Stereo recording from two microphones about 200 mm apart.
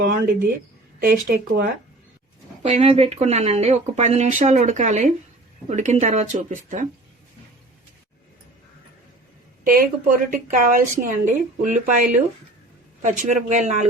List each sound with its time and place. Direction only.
0.0 s speech: 45° right (ahead or behind)
2.6 s speech: 30° right (ahead or behind)
9.6 s speech: 45° right (ahead or behind)
13.0 s speech: 35° right (ahead or behind)